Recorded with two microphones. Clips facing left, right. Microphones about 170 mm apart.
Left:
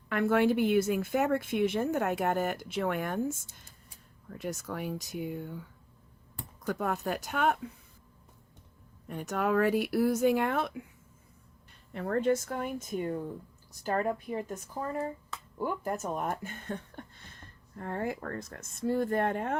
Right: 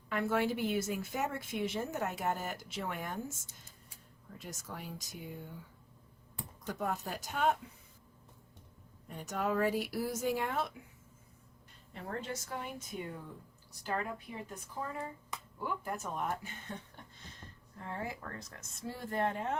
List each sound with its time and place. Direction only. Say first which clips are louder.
0.1 s a woman's voice: left 7 dB; 60° left (ahead or behind)
6.7 s a woman's voice: left 6 dB; 65° left (ahead or behind)
9.0 s a woman's voice: left 5 dB; 65° left (ahead or behind)
11.9 s speech: left 13 dB; 60° left (ahead or behind)